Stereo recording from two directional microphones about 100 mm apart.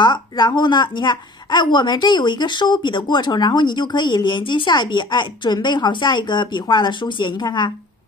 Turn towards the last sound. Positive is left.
turn(degrees=50)  # may be behind; listen again after turning